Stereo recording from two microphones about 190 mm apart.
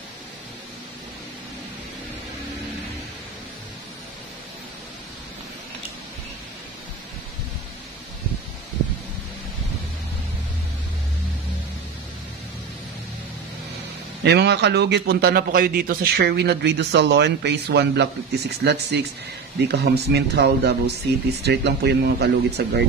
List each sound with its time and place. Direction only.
14.2 s a man's voice: 60° right (ahead or behind)